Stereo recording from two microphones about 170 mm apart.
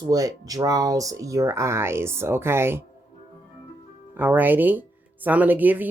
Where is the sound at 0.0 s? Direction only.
20° right (ahead or behind).